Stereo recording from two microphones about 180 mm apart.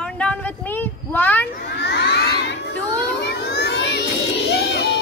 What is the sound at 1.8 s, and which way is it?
Crowd, 70° left (ahead or behind).